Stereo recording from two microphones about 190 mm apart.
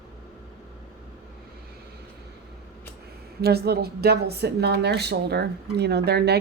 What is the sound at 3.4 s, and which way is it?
A woman's voice, 55° right (ahead or behind).